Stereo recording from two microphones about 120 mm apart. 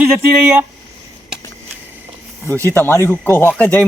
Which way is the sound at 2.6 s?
20° left (ahead or behind).